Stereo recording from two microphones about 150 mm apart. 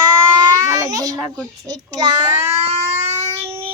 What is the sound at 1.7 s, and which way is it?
Speech, 25° right (ahead or behind).